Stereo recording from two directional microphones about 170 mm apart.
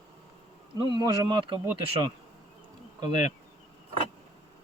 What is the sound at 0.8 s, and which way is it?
Speech, 25° right (ahead or behind).